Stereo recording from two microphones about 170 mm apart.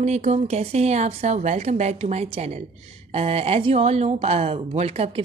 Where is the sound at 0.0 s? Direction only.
40° right (ahead or behind).